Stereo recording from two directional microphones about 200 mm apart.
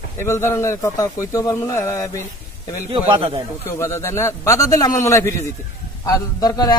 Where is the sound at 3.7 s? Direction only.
15° left (ahead or behind).